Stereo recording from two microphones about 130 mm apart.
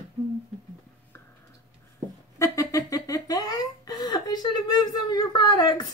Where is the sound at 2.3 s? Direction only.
20° left (ahead or behind).